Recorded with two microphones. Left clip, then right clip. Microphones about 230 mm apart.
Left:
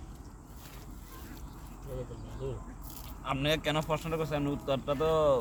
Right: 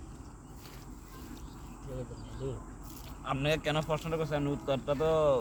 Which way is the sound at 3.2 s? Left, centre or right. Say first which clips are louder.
Left 1 dB; centre.